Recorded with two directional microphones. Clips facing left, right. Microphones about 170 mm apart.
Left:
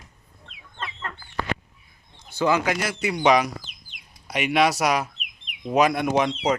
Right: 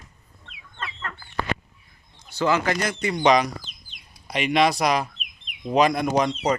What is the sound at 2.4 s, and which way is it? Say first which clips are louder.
Speech: even; 15° left (ahead or behind).